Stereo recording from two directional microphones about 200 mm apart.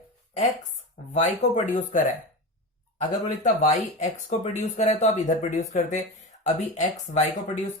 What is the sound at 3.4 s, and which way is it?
Speech, 40° left (ahead or behind).